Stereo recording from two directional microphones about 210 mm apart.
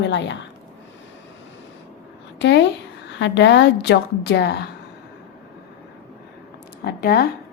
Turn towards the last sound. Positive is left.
turn(degrees=50)  # may be behind; listen again after turning